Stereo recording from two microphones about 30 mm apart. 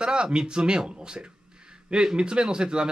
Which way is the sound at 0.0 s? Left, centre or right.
Right.